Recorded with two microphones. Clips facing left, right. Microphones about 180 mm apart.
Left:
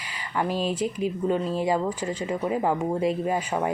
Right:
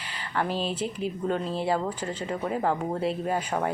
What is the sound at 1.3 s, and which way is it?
Speech, 5° left (ahead or behind).